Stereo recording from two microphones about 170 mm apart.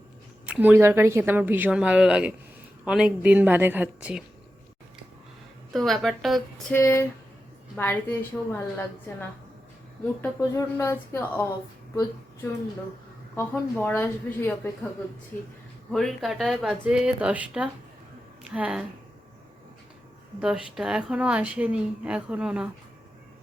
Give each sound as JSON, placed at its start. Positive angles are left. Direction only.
{"t": 0.4, "sound": "speech", "side_deg": -10}
{"t": 5.7, "sound": "a woman's voice", "side_deg": 0}
{"t": 6.7, "sound": "a woman's voice", "side_deg": 15}
{"t": 10.2, "sound": "a woman's voice", "side_deg": 15}
{"t": 13.3, "sound": "a woman's voice", "side_deg": 10}
{"t": 15.9, "sound": "a woman's voice", "side_deg": 0}
{"t": 20.4, "sound": "a woman's voice", "side_deg": -5}